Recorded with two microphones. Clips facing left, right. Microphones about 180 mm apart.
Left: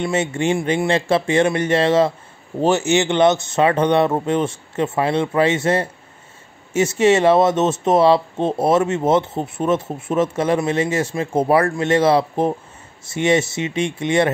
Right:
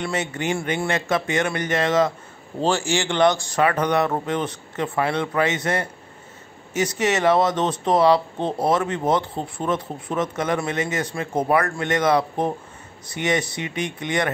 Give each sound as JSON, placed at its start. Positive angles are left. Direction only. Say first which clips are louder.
{"t": 0.0, "sound": "speech", "louder": "left 6 dB", "side_deg": 25}